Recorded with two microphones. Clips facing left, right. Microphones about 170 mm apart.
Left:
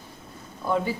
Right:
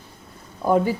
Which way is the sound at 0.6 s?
40° right (ahead or behind).